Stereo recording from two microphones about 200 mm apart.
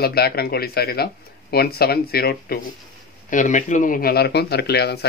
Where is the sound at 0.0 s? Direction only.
50° left (ahead or behind).